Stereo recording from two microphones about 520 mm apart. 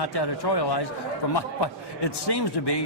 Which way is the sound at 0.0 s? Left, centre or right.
Left.